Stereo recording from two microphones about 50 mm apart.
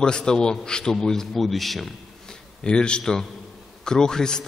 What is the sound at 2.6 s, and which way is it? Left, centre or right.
A man's voice, centre.